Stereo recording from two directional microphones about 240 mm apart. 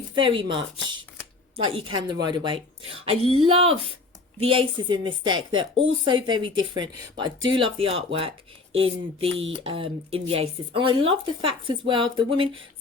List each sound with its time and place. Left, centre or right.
0.1 s speech: right
1.7 s speech: centre